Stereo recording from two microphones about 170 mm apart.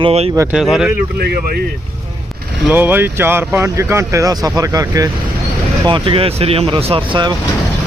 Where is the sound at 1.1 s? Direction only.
65° right (ahead or behind).